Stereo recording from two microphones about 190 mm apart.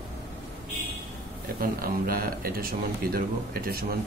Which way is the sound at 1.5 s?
50° right (ahead or behind).